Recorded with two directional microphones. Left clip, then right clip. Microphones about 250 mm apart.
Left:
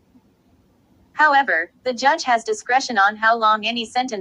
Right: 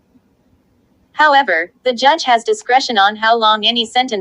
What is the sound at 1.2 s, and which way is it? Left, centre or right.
Speech, right.